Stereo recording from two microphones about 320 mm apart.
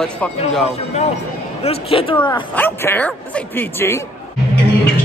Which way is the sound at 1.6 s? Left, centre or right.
Centre.